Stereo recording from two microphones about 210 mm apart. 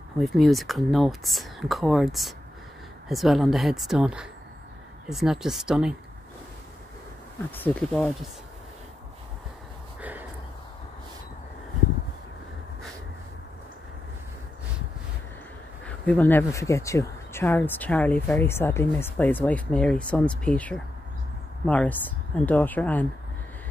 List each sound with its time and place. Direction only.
0.2 s speech: centre (ahead or behind)
7.5 s speech: 5° left (ahead or behind)
9.9 s a sound: 5° right (ahead or behind)
15.8 s speech: 5° left (ahead or behind)